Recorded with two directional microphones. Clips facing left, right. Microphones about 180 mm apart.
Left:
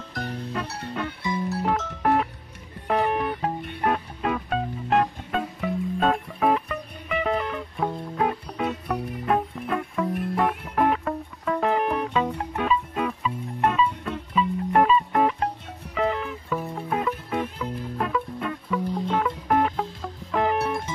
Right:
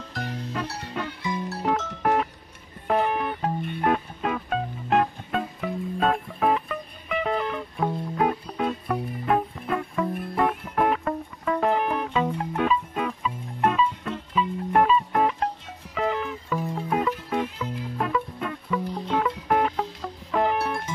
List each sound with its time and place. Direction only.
0.1 s music: centre (ahead or behind)